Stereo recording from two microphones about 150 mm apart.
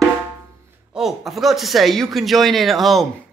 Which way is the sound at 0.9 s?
Centre (ahead or behind).